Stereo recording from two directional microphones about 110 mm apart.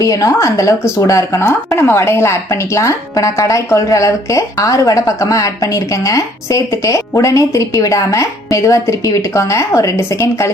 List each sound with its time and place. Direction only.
0.0 s speech: 30° left (ahead or behind)